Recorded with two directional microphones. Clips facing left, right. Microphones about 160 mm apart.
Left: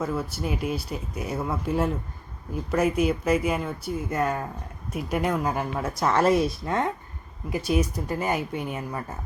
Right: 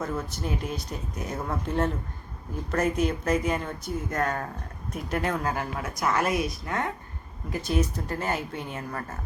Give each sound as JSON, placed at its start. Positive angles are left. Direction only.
{"t": 0.0, "sound": "speech", "side_deg": 5}
{"t": 5.8, "sound": "a woman's voice", "side_deg": 30}
{"t": 7.5, "sound": "speech", "side_deg": 10}